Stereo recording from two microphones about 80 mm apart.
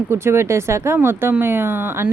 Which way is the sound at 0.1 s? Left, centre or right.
Right.